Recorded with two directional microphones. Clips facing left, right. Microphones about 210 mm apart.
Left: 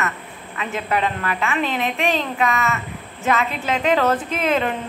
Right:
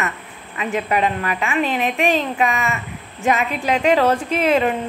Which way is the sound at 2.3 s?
15° right (ahead or behind).